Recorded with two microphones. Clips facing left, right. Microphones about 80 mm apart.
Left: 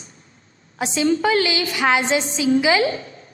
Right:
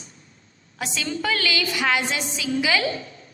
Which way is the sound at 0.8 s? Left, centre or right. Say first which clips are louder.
Left 9 dB; left.